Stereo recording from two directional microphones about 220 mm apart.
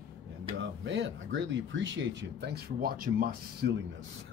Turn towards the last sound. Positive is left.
turn(degrees=-40)  # may be behind; listen again after turning